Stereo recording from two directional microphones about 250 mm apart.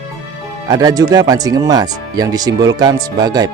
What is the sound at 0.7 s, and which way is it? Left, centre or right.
Speech, centre.